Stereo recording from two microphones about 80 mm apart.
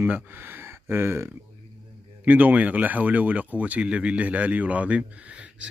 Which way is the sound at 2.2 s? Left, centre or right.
Centre.